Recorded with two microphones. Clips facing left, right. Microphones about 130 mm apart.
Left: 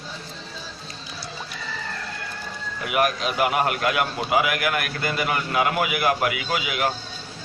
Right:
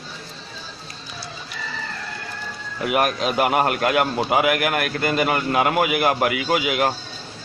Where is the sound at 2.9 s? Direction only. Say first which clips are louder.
Right 2 dB; 35° right (ahead or behind).